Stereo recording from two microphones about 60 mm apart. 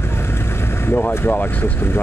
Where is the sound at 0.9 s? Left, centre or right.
Left.